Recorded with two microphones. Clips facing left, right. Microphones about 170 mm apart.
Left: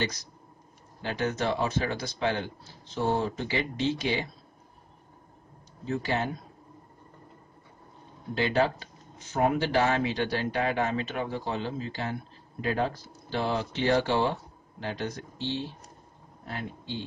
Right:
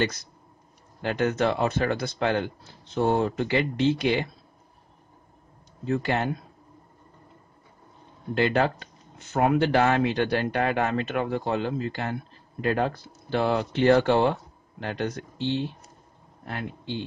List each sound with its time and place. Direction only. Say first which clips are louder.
1.0 s speech: right 5 dB; 55° right (ahead or behind)
5.9 s speech: right 4 dB; 60° right (ahead or behind)
8.4 s speech: right 3 dB; 55° right (ahead or behind)